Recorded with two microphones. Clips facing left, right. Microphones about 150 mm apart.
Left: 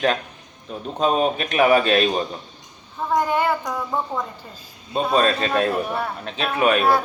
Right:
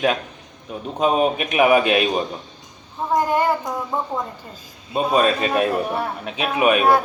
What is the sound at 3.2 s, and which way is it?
Speech, 40° right (ahead or behind).